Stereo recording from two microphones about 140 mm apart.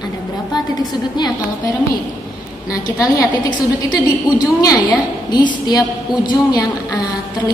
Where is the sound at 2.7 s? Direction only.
25° left (ahead or behind).